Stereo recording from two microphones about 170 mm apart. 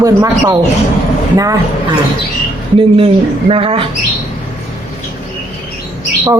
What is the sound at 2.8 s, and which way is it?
Speech, 30° right (ahead or behind).